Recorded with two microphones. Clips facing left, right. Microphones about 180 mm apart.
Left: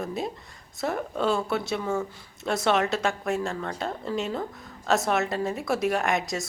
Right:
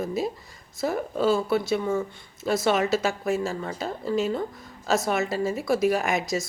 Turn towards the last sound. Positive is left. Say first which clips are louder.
# right 1 dB
turn(degrees=0)  # may be behind; listen again after turning